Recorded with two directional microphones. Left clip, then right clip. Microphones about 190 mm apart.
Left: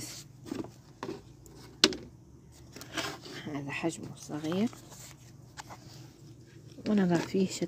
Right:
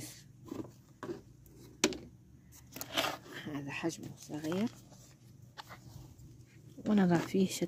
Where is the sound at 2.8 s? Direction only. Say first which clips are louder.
Right 2 dB; 50° right (ahead or behind).